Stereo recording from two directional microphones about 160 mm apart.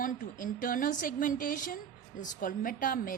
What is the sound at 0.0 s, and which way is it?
A woman's voice, 55° left (ahead or behind).